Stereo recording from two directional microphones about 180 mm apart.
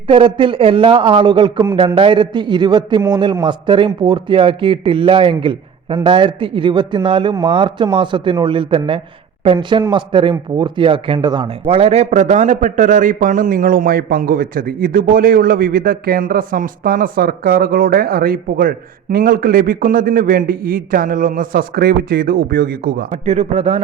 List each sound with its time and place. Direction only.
0.1 s speech: 30° right (ahead or behind); by 23.0 s 60° right (ahead or behind)
23.1 s speech: 40° right (ahead or behind)